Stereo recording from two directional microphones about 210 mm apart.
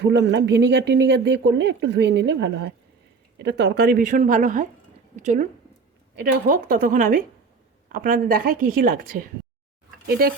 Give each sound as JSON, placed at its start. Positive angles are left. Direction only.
{"t": 0.0, "sound": "a woman's voice", "side_deg": -55}